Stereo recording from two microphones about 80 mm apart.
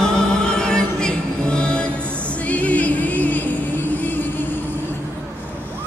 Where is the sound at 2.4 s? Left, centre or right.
Centre.